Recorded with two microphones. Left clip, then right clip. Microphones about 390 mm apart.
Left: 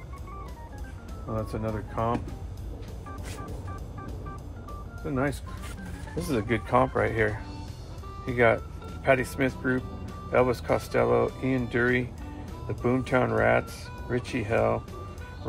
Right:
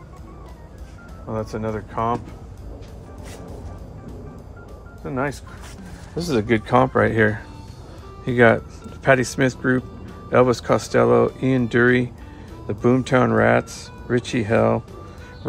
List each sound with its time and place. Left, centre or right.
1.3 s speech: centre
5.0 s speech: centre